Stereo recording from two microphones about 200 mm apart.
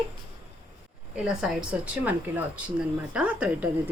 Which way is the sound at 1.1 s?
5° right (ahead or behind).